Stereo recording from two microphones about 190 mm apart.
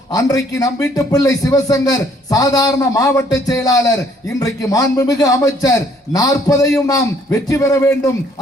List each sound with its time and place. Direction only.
0.1 s a man's voice: 20° left (ahead or behind)